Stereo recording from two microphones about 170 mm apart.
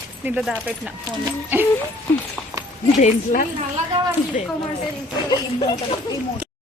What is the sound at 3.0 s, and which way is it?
Speech, 45° left (ahead or behind).